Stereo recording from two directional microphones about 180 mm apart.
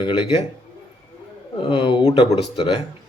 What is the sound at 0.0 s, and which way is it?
Speech, 30° left (ahead or behind).